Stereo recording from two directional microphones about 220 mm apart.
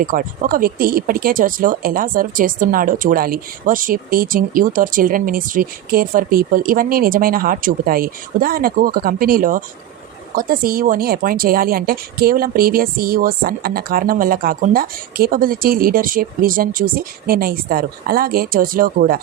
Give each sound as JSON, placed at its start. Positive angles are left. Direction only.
{"t": 0.0, "sound": "speech", "side_deg": -40}